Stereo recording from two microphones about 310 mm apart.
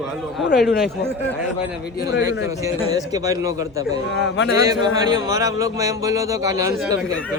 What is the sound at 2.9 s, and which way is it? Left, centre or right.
Speech, centre.